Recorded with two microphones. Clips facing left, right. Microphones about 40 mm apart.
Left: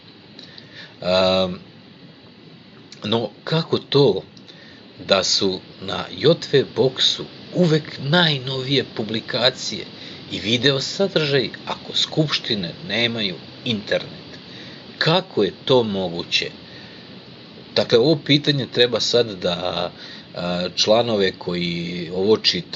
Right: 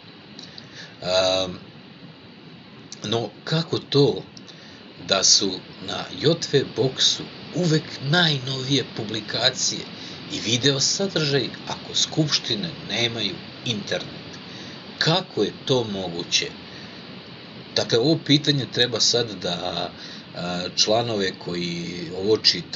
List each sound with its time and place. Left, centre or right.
0.7 s speech: left
3.0 s speech: left
17.7 s speech: left